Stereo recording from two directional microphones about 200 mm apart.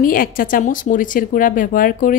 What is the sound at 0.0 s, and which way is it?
A woman's voice, 45° left (ahead or behind).